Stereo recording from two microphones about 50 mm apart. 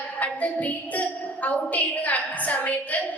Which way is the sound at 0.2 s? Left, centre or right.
Left.